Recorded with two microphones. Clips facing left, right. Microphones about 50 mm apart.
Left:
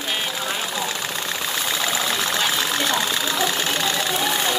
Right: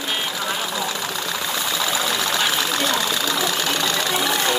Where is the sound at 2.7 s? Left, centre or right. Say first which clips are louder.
Even; left.